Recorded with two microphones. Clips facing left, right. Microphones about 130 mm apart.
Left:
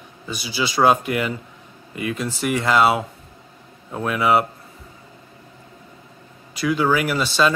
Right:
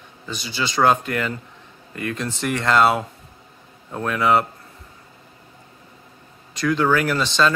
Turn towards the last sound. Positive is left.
turn(degrees=10)  # may be behind; listen again after turning